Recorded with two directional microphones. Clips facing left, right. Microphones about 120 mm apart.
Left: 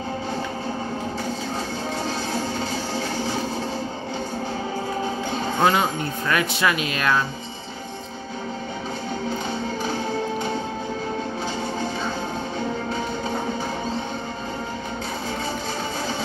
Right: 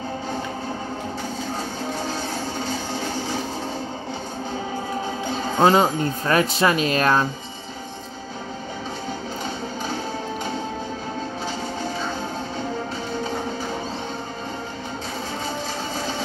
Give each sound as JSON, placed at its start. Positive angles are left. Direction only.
{"t": 5.6, "sound": "speech", "side_deg": -30}